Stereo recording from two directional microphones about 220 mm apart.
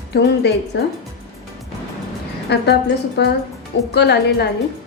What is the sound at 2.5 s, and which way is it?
Speech, 50° left (ahead or behind).